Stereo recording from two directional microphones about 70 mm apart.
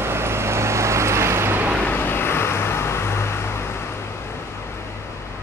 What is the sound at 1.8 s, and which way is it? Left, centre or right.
Vehicle, left.